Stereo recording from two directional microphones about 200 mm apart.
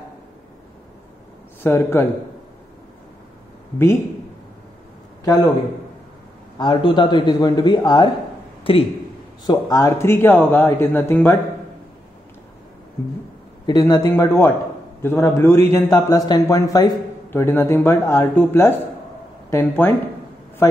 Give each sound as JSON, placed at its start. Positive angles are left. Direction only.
{"t": 1.6, "sound": "a man's voice", "side_deg": 10}
{"t": 3.7, "sound": "a man's voice", "side_deg": 10}
{"t": 5.2, "sound": "a man's voice", "side_deg": 15}
{"t": 6.6, "sound": "a man's voice", "side_deg": 20}
{"t": 13.7, "sound": "a man's voice", "side_deg": 20}